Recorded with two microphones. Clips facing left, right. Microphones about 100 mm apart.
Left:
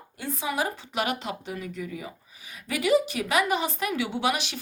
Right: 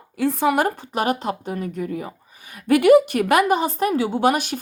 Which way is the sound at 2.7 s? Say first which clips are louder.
Right 10 dB; 60° right (ahead or behind).